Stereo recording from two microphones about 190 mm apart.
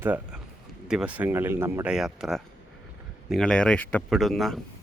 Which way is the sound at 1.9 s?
Centre (ahead or behind).